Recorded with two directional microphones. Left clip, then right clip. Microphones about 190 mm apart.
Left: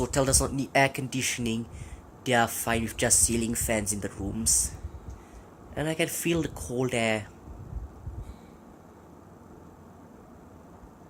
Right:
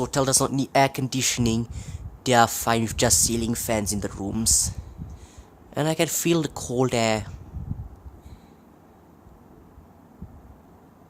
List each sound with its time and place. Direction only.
0.0 s speech: 20° right (ahead or behind)
5.7 s speech: 30° right (ahead or behind)